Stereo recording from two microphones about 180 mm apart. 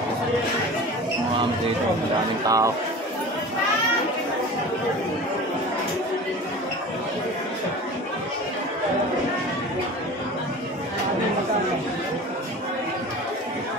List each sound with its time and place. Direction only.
2.4 s a man's voice: 20° right (ahead or behind)